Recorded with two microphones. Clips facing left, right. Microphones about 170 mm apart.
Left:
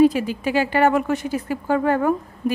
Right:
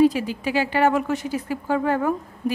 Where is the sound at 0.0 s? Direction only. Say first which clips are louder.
Left 2 dB; 55° left (ahead or behind).